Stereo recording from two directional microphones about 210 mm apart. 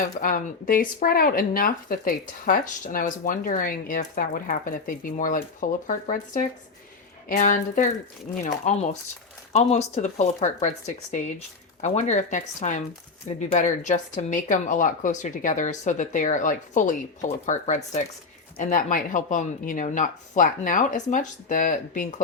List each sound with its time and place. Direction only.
0.2 s speech: 40° left (ahead or behind)